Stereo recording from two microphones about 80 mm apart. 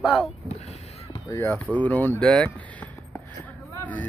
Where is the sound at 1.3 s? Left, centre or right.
Left.